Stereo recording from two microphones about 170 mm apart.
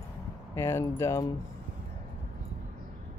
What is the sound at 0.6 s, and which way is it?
Speech, 15° left (ahead or behind).